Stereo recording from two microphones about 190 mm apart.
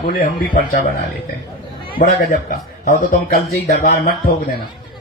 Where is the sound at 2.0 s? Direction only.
50° left (ahead or behind).